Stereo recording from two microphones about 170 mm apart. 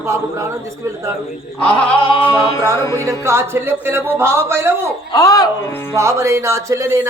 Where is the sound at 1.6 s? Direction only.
5° left (ahead or behind).